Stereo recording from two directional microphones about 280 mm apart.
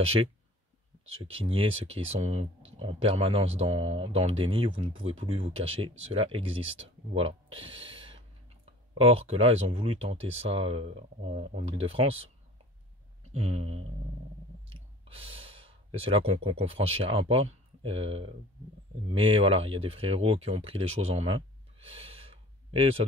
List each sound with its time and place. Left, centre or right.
0.0 s speech: right
1.4 s speech: centre
13.3 s speech: right